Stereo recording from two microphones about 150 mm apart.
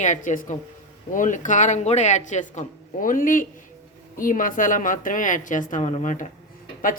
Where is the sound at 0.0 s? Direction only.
55° left (ahead or behind).